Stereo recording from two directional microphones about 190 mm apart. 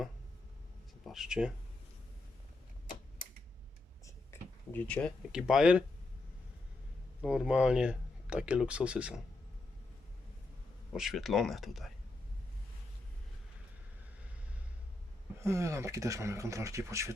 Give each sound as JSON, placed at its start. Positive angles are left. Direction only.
{"t": 1.0, "sound": "speech", "side_deg": 0}
{"t": 4.0, "sound": "a sound", "side_deg": 10}
{"t": 5.3, "sound": "speech", "side_deg": -5}
{"t": 7.2, "sound": "speech", "side_deg": -5}
{"t": 10.9, "sound": "speech", "side_deg": 0}
{"t": 15.4, "sound": "speech", "side_deg": -15}